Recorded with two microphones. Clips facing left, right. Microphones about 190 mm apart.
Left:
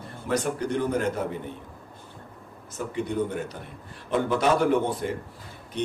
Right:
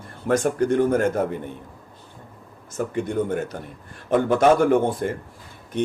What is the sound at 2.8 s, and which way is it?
A man's voice, 50° right (ahead or behind).